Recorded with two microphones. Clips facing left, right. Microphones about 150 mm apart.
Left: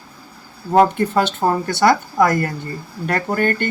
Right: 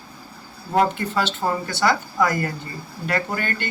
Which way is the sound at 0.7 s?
45° left (ahead or behind).